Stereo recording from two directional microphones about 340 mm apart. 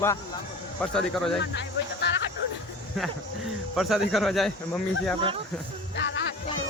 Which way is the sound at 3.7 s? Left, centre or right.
Centre.